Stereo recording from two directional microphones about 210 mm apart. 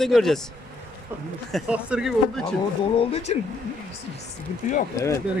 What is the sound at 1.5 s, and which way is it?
Speech, centre (ahead or behind).